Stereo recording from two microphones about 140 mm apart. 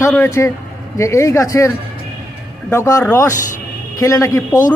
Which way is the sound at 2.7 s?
20° left (ahead or behind).